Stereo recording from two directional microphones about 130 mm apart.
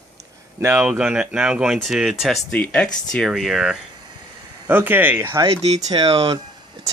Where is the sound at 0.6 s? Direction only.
20° right (ahead or behind).